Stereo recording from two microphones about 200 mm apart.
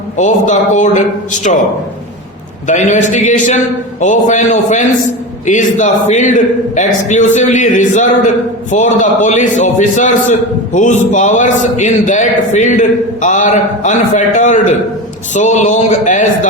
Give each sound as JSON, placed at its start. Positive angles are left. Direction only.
{"t": 0.2, "sound": "a man's voice", "side_deg": 40}
{"t": 2.6, "sound": "a man's voice", "side_deg": 35}